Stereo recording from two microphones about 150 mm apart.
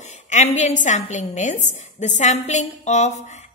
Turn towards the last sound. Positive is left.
turn(degrees=50)  # may be behind; listen again after turning